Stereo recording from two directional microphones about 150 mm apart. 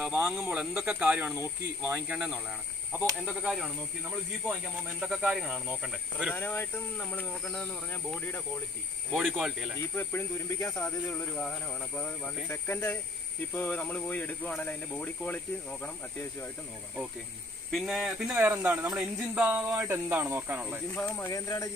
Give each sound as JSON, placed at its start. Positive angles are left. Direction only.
{"t": 0.3, "sound": "speech", "side_deg": -5}
{"t": 3.0, "sound": "speech", "side_deg": 0}
{"t": 5.0, "sound": "speech", "side_deg": 0}
{"t": 6.3, "sound": "speech", "side_deg": 15}
{"t": 9.1, "sound": "speech", "side_deg": 0}
{"t": 9.8, "sound": "speech", "side_deg": 15}
{"t": 17.6, "sound": "speech", "side_deg": 0}
{"t": 20.9, "sound": "speech", "side_deg": 10}
{"t": 21.3, "sound": "speech", "side_deg": 20}